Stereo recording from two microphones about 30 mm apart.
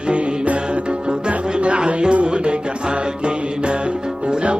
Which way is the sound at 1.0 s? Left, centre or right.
Right.